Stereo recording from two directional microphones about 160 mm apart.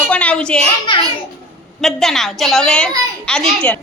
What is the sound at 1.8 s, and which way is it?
A woman's voice, centre (ahead or behind).